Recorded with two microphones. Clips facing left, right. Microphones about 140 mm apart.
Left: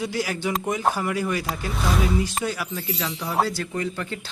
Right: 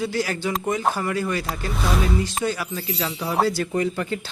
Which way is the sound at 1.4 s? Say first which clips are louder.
Even; centre (ahead or behind).